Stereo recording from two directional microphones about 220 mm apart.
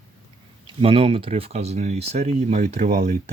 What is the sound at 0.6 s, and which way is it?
Speech, 25° right (ahead or behind).